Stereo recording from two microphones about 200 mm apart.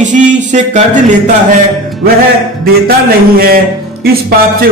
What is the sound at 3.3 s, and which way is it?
Music, 50° right (ahead or behind).